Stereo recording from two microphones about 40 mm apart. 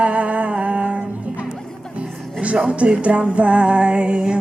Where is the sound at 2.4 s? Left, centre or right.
Right.